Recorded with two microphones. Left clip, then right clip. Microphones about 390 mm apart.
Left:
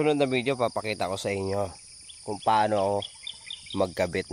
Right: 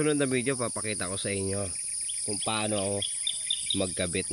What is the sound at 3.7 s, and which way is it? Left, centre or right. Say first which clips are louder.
Speech: left 4 dB; centre.